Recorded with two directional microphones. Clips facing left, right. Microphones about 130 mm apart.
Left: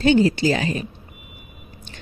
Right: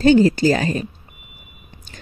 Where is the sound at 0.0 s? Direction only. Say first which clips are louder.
Right 3 dB; 40° right (ahead or behind).